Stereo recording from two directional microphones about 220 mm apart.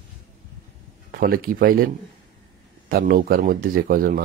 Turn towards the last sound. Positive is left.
turn(degrees=-40)  # may be behind; listen again after turning